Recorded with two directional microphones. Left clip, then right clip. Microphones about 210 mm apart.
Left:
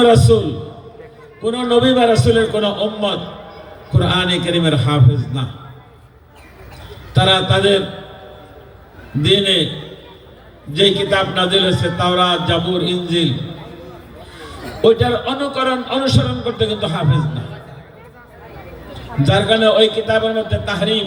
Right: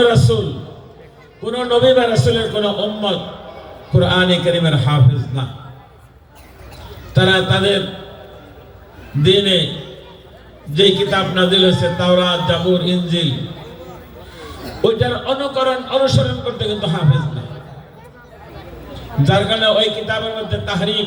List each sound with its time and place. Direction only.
0.0 s a man's voice: 55° left (ahead or behind)
1.5 s a man's voice: 55° left (ahead or behind)
7.1 s a man's voice: 55° left (ahead or behind)
9.2 s a man's voice: 55° left (ahead or behind)
10.8 s a man's voice: 55° left (ahead or behind)
14.8 s a man's voice: 55° left (ahead or behind)
19.2 s a man's voice: 55° left (ahead or behind)